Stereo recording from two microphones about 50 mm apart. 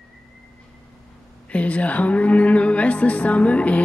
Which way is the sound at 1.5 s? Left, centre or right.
Left.